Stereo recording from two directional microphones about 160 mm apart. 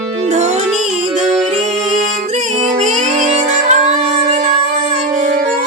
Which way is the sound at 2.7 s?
45° right (ahead or behind).